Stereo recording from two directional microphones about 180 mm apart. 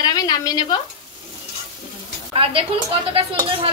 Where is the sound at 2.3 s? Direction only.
30° right (ahead or behind).